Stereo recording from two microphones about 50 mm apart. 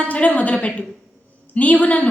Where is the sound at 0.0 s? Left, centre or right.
Left.